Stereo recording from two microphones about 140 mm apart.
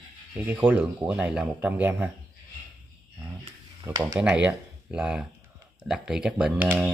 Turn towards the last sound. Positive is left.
turn(degrees=-15)  # may be behind; listen again after turning